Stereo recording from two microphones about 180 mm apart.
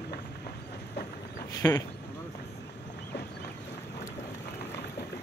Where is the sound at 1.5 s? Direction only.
20° left (ahead or behind).